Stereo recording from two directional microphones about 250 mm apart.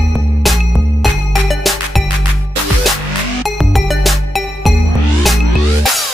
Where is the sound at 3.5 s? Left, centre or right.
Centre.